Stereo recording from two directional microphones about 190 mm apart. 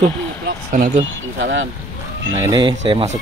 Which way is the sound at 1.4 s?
80° right.